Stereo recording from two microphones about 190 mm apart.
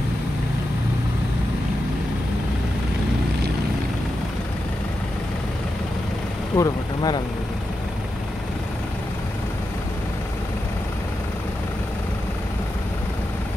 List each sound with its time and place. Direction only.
6.5 s speech: 20° left (ahead or behind)